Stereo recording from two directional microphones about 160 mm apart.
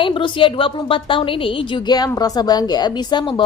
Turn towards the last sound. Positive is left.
turn(degrees=30)  # may be behind; listen again after turning